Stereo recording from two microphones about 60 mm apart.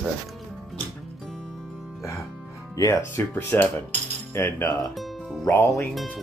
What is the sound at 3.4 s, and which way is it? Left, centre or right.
Speech, left.